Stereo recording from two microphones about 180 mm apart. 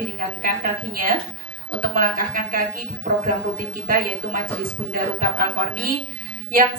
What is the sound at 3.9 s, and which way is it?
A woman's voice, 55° right (ahead or behind).